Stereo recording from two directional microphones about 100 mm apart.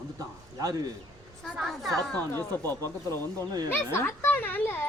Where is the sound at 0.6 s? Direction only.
40° right (ahead or behind).